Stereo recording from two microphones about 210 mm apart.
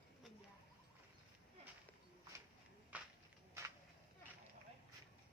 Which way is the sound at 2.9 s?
5° right (ahead or behind).